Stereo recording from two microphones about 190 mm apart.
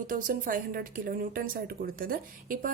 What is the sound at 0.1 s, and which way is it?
A woman's voice, 45° right (ahead or behind).